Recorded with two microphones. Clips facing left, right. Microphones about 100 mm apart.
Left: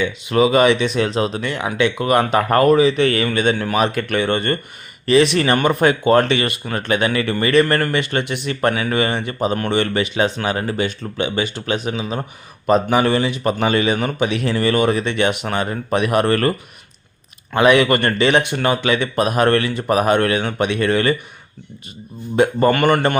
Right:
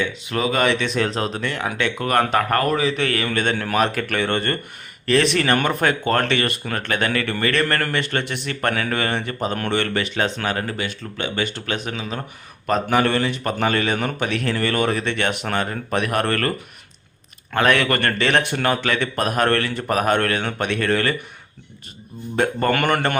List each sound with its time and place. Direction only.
0.3 s speech: 15° left (ahead or behind)
2.8 s speech: centre (ahead or behind)
22.4 s speech: 5° left (ahead or behind)